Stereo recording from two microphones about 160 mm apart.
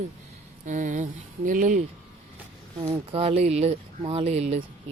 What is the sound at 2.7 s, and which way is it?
Speech, 30° right (ahead or behind).